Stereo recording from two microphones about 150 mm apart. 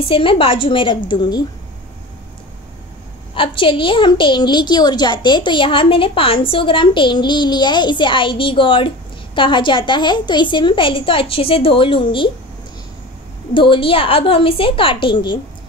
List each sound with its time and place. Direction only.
0.1 s a woman's voice: 35° left (ahead or behind)
3.3 s a woman's voice: 35° left (ahead or behind)
13.5 s a woman's voice: 35° left (ahead or behind)